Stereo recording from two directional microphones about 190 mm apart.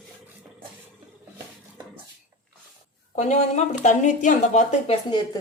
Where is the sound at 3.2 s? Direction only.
35° left (ahead or behind).